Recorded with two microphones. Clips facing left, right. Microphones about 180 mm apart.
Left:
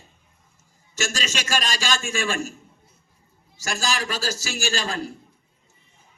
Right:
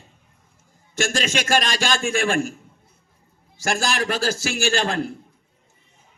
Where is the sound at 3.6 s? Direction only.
55° right (ahead or behind).